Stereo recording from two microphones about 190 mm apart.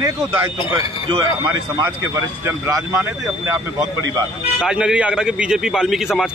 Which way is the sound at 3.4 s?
15° right (ahead or behind).